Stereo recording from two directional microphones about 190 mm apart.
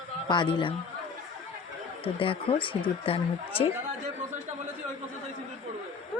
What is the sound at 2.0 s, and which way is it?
A woman's voice, 30° left (ahead or behind).